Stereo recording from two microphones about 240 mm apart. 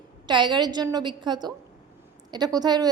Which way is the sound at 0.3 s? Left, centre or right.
Centre.